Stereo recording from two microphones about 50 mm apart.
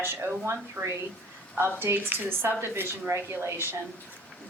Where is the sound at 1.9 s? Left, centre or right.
Right.